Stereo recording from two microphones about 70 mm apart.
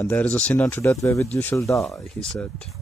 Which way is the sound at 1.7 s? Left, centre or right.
Centre.